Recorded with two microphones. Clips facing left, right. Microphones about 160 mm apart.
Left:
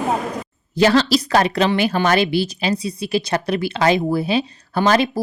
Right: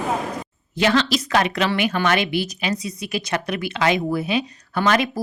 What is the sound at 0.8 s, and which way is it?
A woman's voice, 35° left (ahead or behind).